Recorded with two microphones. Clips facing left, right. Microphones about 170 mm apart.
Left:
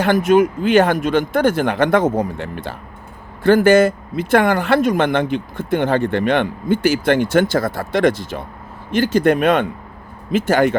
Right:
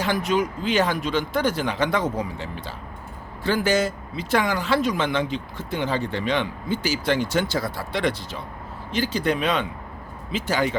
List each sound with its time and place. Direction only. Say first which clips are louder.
0.0 s speech: left 9 dB; 55° left (ahead or behind)